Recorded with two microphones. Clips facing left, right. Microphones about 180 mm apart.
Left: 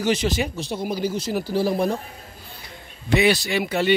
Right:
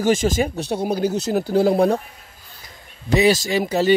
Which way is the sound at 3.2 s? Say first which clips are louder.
Right 3 dB; 40° right (ahead or behind).